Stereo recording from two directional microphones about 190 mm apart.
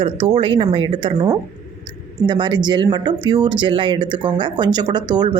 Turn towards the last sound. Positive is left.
turn(degrees=-20)  # may be behind; listen again after turning